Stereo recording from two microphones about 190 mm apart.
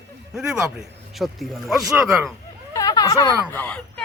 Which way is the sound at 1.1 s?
Centre (ahead or behind).